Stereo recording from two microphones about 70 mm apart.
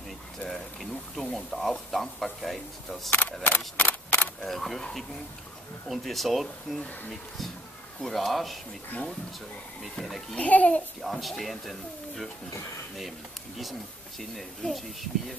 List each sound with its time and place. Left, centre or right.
0.5 s pour: centre
1.2 s speech: centre
3.1 s a child's voice: left
4.4 s speech: centre
8.0 s speech: centre
9.9 s speech: centre
10.3 s a child's voice: left
11.0 s speech: centre
14.3 s speech: centre